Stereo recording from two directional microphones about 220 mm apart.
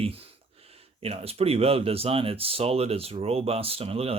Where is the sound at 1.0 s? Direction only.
25° right (ahead or behind).